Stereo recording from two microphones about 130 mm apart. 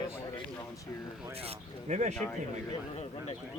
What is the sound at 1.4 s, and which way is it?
Speech, 55° right (ahead or behind).